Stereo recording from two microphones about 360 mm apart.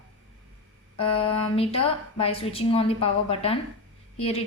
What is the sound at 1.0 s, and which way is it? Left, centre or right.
A woman's voice, centre.